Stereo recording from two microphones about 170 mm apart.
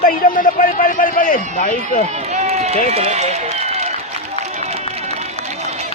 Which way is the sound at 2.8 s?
40° right (ahead or behind).